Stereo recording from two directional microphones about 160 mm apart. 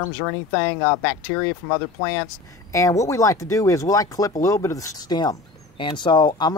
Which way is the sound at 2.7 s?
20° left (ahead or behind).